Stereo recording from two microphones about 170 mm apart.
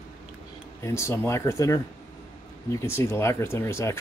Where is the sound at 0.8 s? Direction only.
15° left (ahead or behind).